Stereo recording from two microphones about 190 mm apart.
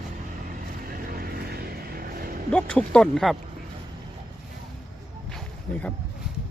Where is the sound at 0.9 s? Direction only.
50° right (ahead or behind).